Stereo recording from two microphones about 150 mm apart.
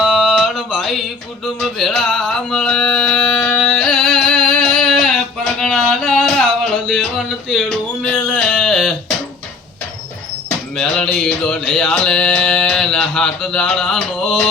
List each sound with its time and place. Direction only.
0.0 s mantra: 5° right (ahead or behind)
1.5 s music: centre (ahead or behind)
8.0 s a sound: 5° left (ahead or behind)
10.8 s music: 5° left (ahead or behind)